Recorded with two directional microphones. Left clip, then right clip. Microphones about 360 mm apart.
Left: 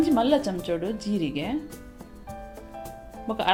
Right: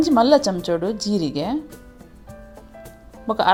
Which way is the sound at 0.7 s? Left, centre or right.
Centre.